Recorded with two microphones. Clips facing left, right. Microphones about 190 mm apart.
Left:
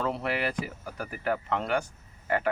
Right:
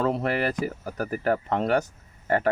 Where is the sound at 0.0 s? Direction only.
45° right (ahead or behind).